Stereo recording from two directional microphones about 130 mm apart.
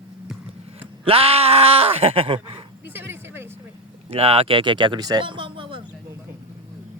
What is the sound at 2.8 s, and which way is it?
Vehicle, 15° right (ahead or behind).